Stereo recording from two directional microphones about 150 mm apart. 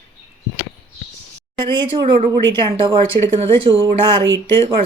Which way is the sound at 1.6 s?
35° right (ahead or behind).